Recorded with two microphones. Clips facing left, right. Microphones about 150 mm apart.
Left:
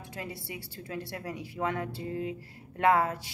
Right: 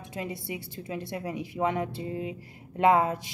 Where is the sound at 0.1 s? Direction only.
20° right (ahead or behind).